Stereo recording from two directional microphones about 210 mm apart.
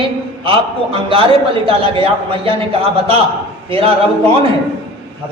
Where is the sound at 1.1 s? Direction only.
25° right (ahead or behind).